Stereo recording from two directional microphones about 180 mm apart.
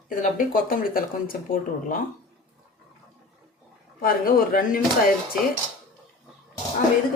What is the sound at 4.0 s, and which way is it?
Speech, 55° left (ahead or behind).